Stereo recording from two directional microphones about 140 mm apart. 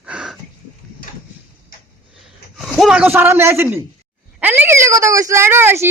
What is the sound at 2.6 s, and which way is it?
A man's voice, centre (ahead or behind).